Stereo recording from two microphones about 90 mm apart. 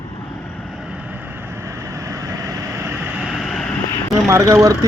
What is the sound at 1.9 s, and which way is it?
Vehicle, 35° right (ahead or behind).